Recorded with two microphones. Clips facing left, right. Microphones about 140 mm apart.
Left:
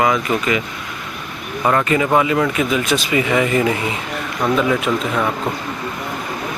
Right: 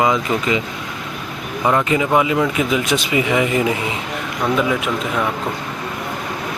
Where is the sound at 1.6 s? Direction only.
5° right (ahead or behind).